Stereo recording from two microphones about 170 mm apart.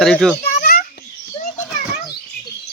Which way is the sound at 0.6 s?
55° left (ahead or behind).